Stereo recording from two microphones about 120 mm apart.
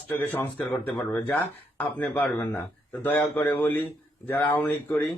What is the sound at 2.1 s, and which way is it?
A man's voice, 15° left (ahead or behind).